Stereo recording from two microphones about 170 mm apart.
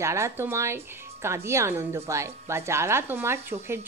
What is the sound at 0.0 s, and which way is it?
Speech, 15° right (ahead or behind).